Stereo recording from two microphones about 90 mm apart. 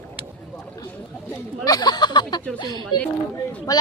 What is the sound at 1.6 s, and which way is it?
A woman's voice, 50° left (ahead or behind).